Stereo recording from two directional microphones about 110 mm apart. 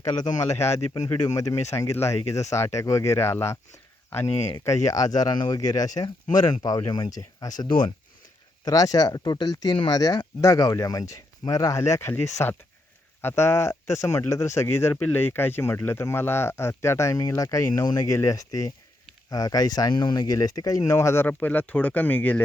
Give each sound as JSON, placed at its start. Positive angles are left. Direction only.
{"t": 0.0, "sound": "speech", "side_deg": 30}
{"t": 0.9, "sound": "speech", "side_deg": 35}
{"t": 4.6, "sound": "speech", "side_deg": 30}
{"t": 8.6, "sound": "speech", "side_deg": 35}
{"t": 10.4, "sound": "speech", "side_deg": 35}